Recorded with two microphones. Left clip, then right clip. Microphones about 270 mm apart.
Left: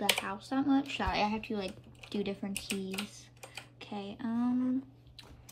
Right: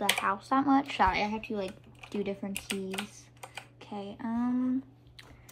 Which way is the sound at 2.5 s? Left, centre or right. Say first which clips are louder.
Right 2 dB; centre.